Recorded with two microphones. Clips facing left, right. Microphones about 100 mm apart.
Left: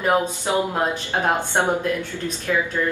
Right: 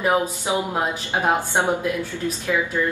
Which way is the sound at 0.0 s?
10° right (ahead or behind).